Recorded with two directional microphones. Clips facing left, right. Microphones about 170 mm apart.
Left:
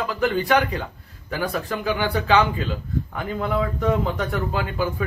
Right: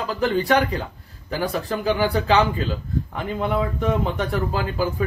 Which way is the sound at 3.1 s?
25° right (ahead or behind).